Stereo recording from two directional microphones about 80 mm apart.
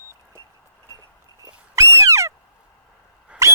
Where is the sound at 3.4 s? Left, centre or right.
Right.